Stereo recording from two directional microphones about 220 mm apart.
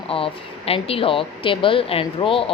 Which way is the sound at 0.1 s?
25° left (ahead or behind).